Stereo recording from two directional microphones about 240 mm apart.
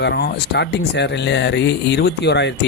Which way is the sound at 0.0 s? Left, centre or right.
Left.